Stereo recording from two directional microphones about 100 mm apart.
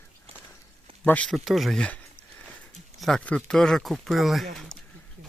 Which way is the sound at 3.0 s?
5° left (ahead or behind).